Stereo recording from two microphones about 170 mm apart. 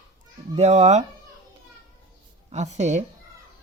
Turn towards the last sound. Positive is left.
turn(degrees=-45)  # may be behind; listen again after turning